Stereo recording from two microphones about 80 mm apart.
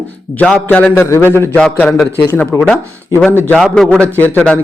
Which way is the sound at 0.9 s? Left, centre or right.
Left.